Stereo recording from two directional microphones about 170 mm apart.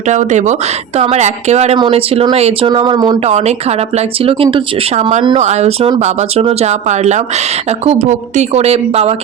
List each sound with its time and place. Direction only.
0.1 s speech: 45° right (ahead or behind); by 3.2 s 25° right (ahead or behind)
3.2 s speech: 40° right (ahead or behind)
4.9 s speech: 45° right (ahead or behind)